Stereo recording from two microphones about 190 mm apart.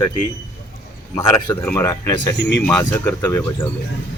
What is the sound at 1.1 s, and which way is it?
Speech, 20° left (ahead or behind).